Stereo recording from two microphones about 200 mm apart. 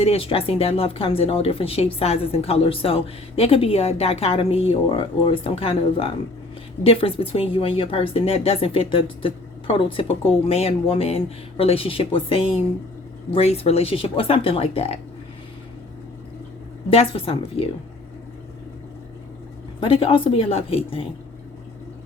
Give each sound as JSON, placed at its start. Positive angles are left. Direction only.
{"t": 0.0, "sound": "speech", "side_deg": 30}
{"t": 16.9, "sound": "speech", "side_deg": 30}
{"t": 19.8, "sound": "speech", "side_deg": 30}